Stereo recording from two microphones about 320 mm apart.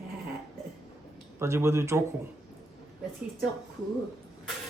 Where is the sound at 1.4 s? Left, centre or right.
Centre.